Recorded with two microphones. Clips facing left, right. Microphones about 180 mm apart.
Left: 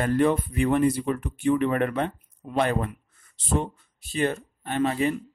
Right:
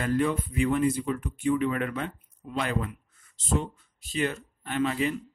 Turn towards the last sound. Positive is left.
turn(degrees=45)  # may be behind; listen again after turning